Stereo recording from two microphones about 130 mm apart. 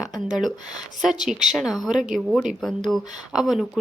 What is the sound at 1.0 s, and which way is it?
A woman's voice, 5° right (ahead or behind).